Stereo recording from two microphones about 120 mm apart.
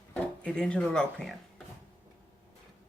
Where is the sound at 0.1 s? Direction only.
10° left (ahead or behind).